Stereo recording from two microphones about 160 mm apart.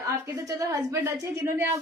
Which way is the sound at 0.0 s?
20° right (ahead or behind).